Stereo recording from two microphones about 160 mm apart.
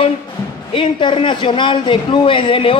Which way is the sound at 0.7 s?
30° left (ahead or behind).